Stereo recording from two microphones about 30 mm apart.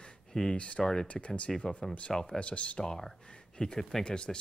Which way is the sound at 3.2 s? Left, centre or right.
Left.